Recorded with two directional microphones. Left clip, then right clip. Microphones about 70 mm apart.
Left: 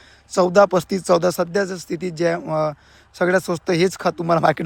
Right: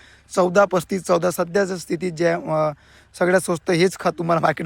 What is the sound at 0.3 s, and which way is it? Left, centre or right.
Speech, left.